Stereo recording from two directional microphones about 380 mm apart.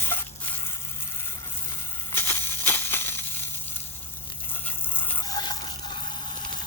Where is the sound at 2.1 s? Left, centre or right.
Centre.